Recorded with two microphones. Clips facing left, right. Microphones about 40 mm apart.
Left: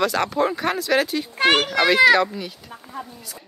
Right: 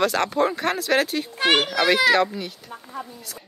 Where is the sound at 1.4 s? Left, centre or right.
Left.